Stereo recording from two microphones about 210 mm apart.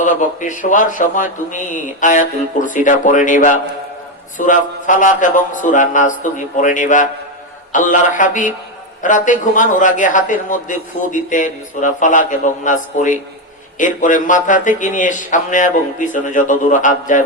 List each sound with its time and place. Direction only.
0.0 s a man's voice: 35° left (ahead or behind)